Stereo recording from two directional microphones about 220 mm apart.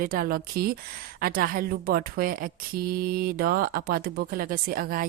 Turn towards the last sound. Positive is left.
turn(degrees=-40)  # may be behind; listen again after turning